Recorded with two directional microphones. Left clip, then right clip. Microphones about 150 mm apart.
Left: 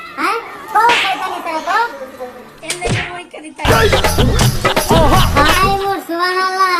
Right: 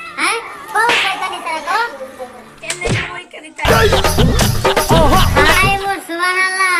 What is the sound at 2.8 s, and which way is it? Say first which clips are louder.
Music: even; centre (ahead or behind).